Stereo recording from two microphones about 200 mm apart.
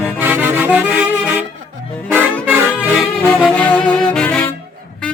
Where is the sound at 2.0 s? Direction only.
10° right (ahead or behind).